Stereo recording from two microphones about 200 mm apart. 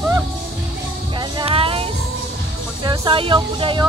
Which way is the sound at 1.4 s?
25° right (ahead or behind).